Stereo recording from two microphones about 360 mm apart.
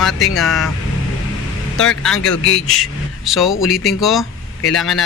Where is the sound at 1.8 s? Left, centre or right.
Centre.